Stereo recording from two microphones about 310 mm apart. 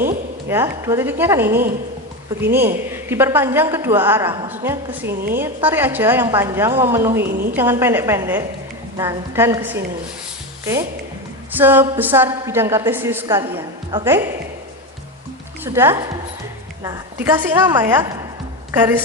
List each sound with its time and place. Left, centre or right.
0.4 s a woman's voice: centre
5.0 s a woman's voice: right
5.4 s a woman's voice: centre
7.3 s a woman's voice: right
7.5 s a woman's voice: centre
11.5 s a woman's voice: centre
15.6 s a woman's voice: centre